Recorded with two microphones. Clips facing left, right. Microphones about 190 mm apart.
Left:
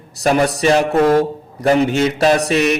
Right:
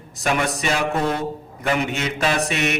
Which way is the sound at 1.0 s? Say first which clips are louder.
Left 10 dB; 80° left.